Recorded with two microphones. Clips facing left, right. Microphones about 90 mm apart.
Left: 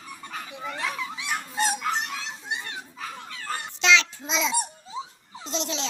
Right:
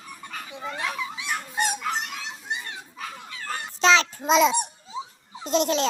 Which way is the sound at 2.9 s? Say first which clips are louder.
Even; centre (ahead or behind).